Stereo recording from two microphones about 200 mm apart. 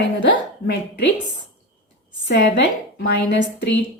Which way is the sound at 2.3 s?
60° left (ahead or behind).